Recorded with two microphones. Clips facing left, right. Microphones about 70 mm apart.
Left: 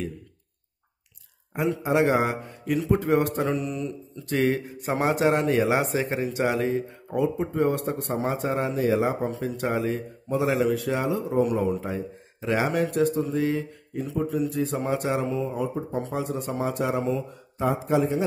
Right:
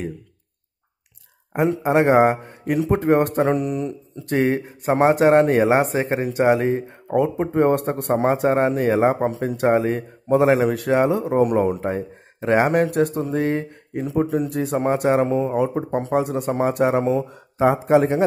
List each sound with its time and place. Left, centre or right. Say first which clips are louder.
1.5 s speech: right 5 dB; right
7.2 s a man's voice: right 5 dB; right
15.5 s a man's voice: right 7 dB; right